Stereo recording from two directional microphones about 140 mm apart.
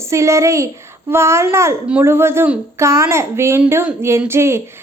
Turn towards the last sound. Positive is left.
turn(degrees=-20)  # may be behind; listen again after turning